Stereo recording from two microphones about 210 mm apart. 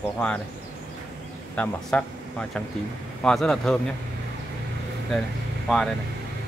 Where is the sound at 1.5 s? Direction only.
5° left (ahead or behind).